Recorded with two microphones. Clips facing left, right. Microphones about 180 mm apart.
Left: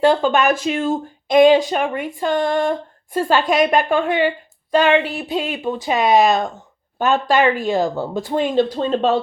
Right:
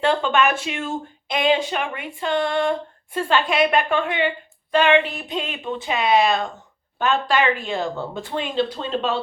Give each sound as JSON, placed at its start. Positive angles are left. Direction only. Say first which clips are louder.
{"t": 0.0, "sound": "speech", "louder": "left 4 dB", "side_deg": 40}